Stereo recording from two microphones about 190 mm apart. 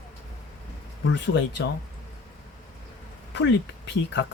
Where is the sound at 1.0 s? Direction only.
70° left (ahead or behind).